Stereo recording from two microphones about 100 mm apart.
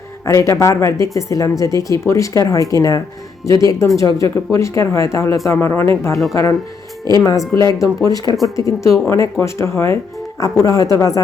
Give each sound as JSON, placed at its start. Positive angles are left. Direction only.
{"t": 0.3, "sound": "speech", "side_deg": 30}
{"t": 6.3, "sound": "speech", "side_deg": 35}